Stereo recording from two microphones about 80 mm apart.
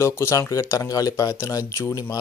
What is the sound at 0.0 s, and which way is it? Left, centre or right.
Speech, left.